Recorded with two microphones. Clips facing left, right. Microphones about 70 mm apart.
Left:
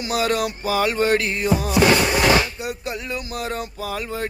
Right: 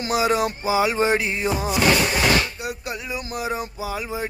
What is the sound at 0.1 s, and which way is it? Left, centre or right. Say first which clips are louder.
Speech: right 1 dB; centre.